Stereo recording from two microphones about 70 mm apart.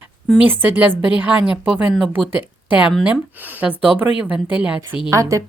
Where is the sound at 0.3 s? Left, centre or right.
Right.